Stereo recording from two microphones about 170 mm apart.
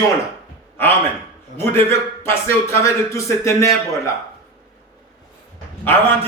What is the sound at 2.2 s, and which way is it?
Speech, 15° left (ahead or behind).